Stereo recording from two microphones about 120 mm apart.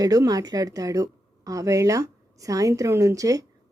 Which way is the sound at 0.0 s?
30° right (ahead or behind).